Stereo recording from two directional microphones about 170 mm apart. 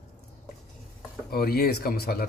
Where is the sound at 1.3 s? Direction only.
65° left (ahead or behind).